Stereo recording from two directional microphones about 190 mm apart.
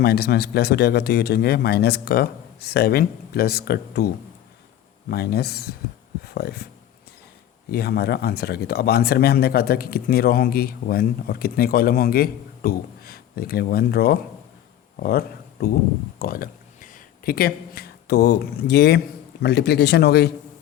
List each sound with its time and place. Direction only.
0.0 s speech: 55° left (ahead or behind)
5.1 s speech: 55° left (ahead or behind)
7.7 s speech: 55° left (ahead or behind)